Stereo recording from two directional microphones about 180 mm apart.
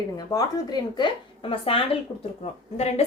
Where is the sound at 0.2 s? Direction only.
20° left (ahead or behind).